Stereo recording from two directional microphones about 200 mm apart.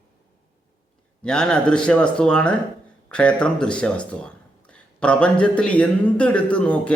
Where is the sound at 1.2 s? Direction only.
5° left (ahead or behind).